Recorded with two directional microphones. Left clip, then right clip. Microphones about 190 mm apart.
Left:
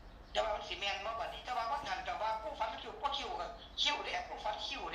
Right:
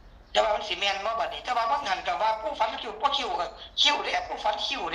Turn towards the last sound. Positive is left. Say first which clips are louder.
# right 12 dB
turn(degrees=-60)  # may be behind; listen again after turning